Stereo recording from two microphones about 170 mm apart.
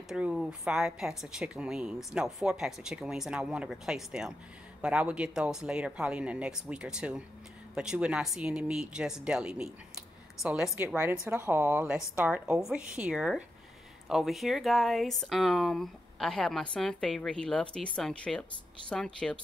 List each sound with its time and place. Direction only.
0.1 s speech: 5° right (ahead or behind)